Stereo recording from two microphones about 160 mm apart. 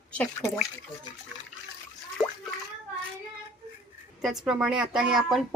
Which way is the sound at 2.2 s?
20° left (ahead or behind).